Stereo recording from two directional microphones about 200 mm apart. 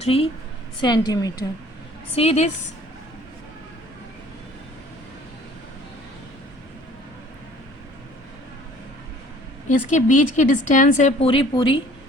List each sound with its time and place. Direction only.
0.0 s a woman's voice: 30° left (ahead or behind)
2.1 s a woman's voice: 35° left (ahead or behind)
9.6 s a woman's voice: 40° left (ahead or behind)